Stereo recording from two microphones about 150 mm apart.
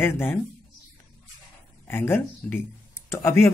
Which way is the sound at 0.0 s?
15° left (ahead or behind).